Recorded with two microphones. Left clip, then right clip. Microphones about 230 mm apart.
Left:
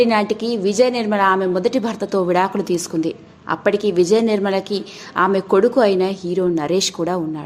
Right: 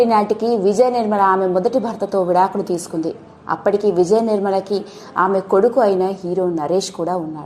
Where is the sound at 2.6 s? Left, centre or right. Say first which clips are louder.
Left 1 dB; centre.